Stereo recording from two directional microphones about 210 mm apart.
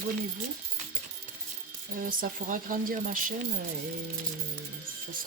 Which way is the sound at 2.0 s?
40° right (ahead or behind).